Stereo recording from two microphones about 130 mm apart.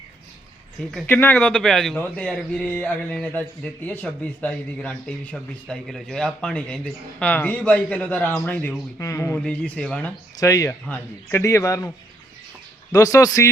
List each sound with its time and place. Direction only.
1.0 s a man's voice: 15° left (ahead or behind)
9.4 s speech: 10° left (ahead or behind)
10.4 s a man's voice: 25° left (ahead or behind)
12.9 s a man's voice: 25° left (ahead or behind)